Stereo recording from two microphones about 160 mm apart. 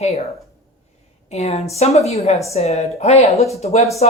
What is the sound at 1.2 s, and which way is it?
Speech, 45° left (ahead or behind).